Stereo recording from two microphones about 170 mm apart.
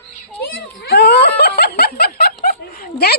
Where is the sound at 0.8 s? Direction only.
70° left (ahead or behind).